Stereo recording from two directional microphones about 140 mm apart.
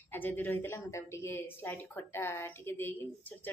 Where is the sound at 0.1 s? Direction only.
15° left (ahead or behind).